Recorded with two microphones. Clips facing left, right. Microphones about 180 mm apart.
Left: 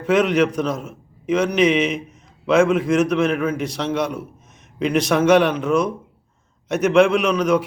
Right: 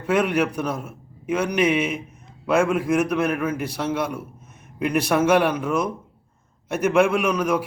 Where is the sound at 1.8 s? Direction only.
75° left (ahead or behind).